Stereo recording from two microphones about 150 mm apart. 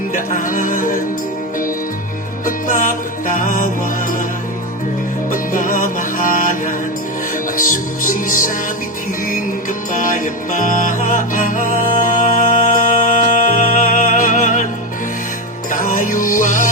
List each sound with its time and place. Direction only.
0.1 s music: 65° left (ahead or behind)
2.6 s music: 65° left (ahead or behind)
5.3 s music: 65° left (ahead or behind)
9.9 s music: 65° left (ahead or behind)
15.7 s music: 65° left (ahead or behind)